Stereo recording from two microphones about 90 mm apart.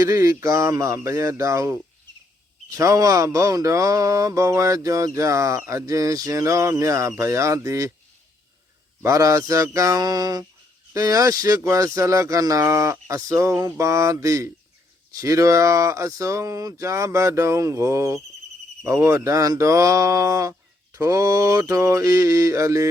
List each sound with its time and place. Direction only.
0.0 s mantra: 35° right (ahead or behind)
9.0 s mantra: 35° right (ahead or behind)